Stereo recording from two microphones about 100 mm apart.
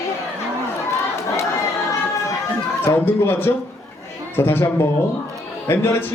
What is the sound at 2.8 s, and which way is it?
Speech, 20° left (ahead or behind).